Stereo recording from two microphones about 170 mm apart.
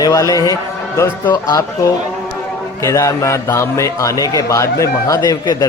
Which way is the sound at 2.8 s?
15° left (ahead or behind).